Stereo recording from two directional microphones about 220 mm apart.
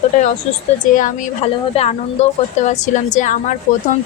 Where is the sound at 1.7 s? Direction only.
30° left (ahead or behind).